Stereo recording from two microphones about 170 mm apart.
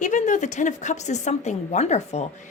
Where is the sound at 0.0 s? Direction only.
50° left (ahead or behind).